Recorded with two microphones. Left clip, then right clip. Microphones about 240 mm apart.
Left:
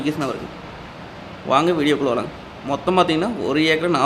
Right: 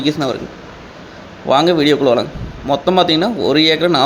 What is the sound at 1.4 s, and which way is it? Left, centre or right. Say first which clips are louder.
Speech: right 5 dB; centre.